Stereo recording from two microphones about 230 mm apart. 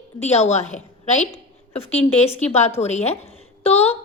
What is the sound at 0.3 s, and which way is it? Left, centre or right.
Speech, left.